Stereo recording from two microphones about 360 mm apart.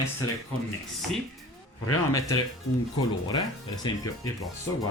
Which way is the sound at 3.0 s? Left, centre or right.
Centre.